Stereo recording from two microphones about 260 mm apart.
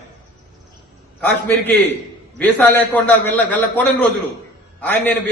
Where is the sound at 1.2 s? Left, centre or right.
Centre.